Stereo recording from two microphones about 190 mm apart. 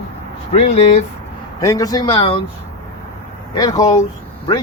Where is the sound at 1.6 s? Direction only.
20° left (ahead or behind).